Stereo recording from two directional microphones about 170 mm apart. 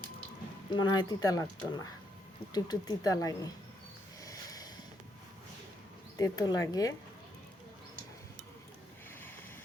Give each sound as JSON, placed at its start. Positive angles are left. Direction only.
{"t": 0.8, "sound": "speech", "side_deg": 25}
{"t": 4.2, "sound": "a sound", "side_deg": 20}
{"t": 6.1, "sound": "speech", "side_deg": 20}